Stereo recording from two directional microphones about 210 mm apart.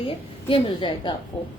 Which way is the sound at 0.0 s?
25° left (ahead or behind).